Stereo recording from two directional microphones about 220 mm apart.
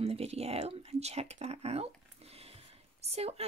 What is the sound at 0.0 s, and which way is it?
Speech, 30° right (ahead or behind).